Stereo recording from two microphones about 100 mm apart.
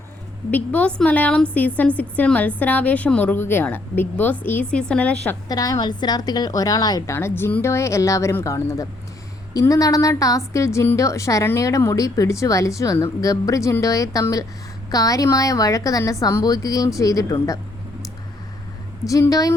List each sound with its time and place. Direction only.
0.5 s a woman's voice: 15° left (ahead or behind)
5.5 s a woman's voice: 40° left (ahead or behind)
7.2 s a woman's voice: 25° left (ahead or behind)
19.0 s a woman's voice: 35° left (ahead or behind)